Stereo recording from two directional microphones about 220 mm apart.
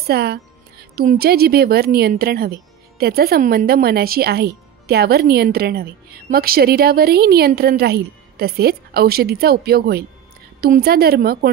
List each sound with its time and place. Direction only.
0.0 s speech: 45° right (ahead or behind)